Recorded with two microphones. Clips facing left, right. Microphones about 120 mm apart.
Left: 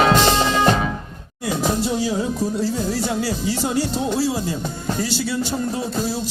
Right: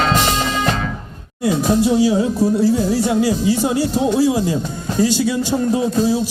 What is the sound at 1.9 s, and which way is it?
Speech, 10° right (ahead or behind).